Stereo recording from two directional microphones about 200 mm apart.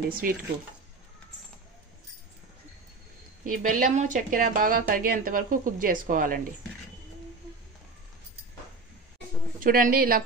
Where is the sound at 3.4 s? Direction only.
40° right (ahead or behind).